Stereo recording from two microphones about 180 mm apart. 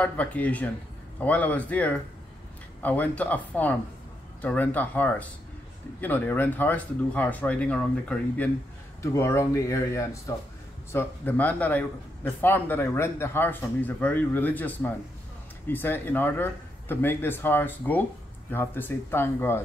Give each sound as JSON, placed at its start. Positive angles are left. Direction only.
{"t": 0.0, "sound": "a man's voice", "side_deg": 10}